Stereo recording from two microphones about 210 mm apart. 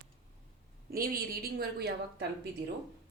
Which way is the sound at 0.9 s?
45° right (ahead or behind).